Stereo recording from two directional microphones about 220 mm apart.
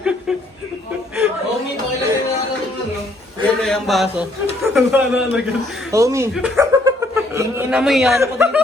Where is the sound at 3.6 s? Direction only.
Centre (ahead or behind).